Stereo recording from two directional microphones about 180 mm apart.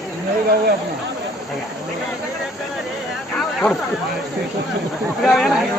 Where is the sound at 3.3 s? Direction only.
Centre (ahead or behind).